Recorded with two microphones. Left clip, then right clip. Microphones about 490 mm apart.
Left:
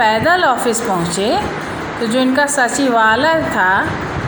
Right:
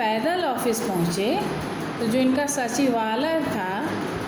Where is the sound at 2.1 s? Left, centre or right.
Right.